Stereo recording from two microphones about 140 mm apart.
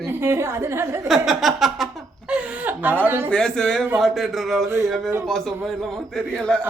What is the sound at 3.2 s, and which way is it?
A man's voice, 5° left (ahead or behind).